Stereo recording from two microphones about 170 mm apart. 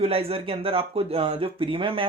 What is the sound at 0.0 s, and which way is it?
Speech, 35° right (ahead or behind).